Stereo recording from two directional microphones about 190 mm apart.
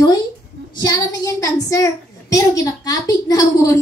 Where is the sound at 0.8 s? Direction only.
20° left (ahead or behind).